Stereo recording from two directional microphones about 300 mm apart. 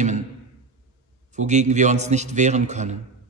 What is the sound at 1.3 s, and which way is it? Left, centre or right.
A man's voice, right.